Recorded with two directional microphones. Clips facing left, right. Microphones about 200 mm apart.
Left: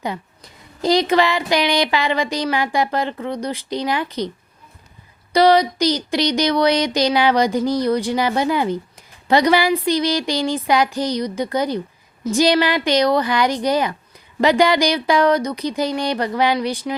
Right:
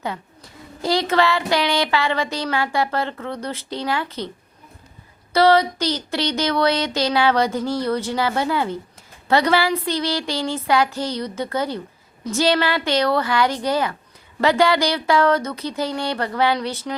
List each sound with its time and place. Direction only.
0.8 s speech: 15° left (ahead or behind)
5.3 s speech: 15° left (ahead or behind)